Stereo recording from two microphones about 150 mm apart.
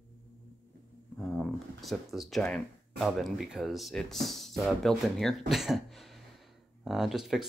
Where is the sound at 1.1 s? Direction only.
Centre (ahead or behind).